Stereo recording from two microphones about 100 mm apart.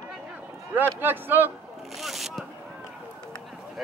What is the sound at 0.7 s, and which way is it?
Speech, 20° right (ahead or behind).